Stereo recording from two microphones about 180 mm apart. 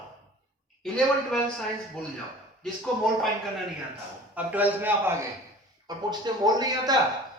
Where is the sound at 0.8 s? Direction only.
5° left (ahead or behind).